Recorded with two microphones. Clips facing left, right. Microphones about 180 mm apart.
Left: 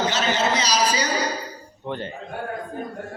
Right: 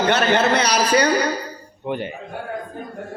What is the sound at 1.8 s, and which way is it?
Speech, 15° right (ahead or behind).